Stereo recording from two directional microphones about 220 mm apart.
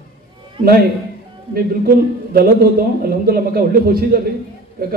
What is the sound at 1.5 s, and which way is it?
A man's voice, 45° right (ahead or behind).